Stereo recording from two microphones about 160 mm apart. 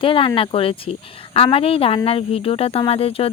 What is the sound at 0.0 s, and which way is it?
Speech, 35° left (ahead or behind).